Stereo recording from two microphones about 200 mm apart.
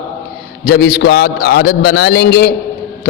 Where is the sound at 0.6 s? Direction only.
50° left (ahead or behind).